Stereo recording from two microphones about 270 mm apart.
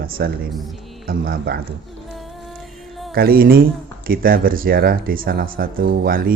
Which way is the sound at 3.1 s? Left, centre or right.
Right.